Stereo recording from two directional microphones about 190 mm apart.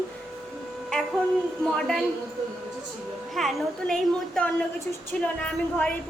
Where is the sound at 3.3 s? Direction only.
Centre (ahead or behind).